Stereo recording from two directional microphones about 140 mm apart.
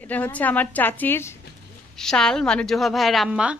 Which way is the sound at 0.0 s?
10° left (ahead or behind).